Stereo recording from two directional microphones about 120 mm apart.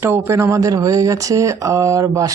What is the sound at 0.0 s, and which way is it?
Speech, 20° right (ahead or behind).